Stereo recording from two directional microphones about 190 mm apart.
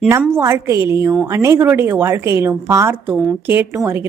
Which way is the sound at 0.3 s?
15° right (ahead or behind).